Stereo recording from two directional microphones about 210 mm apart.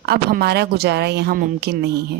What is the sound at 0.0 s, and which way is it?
A woman's voice, 50° right (ahead or behind).